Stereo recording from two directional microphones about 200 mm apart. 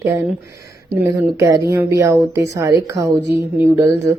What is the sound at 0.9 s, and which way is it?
Speech, 15° right (ahead or behind).